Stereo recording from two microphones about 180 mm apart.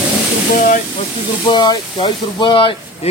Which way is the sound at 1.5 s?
25° left (ahead or behind).